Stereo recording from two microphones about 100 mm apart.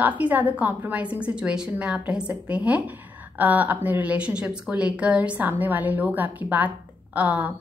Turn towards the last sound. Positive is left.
turn(degrees=-15)  # may be behind; listen again after turning